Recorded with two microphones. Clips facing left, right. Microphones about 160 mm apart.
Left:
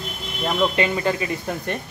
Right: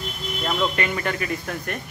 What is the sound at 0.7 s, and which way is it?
Speech, 25° left (ahead or behind).